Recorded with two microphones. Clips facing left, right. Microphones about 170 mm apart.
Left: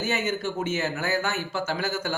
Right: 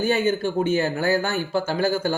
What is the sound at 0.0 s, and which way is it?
Speech, 30° right (ahead or behind).